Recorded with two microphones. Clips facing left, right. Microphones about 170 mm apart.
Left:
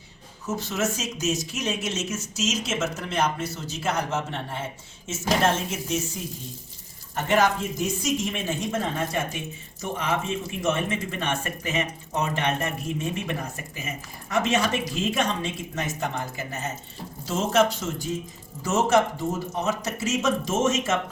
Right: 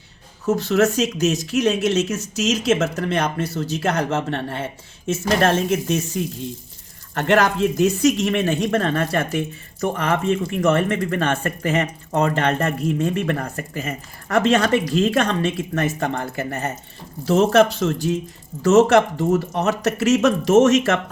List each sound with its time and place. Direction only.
0.4 s speech: 65° right (ahead or behind)
7.1 s speech: 75° right (ahead or behind)